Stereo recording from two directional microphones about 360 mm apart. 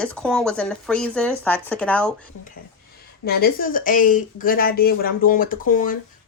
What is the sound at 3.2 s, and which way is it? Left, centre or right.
Speech, left.